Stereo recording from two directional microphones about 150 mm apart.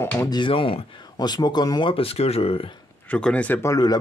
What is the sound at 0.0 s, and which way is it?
Speech, 15° left (ahead or behind).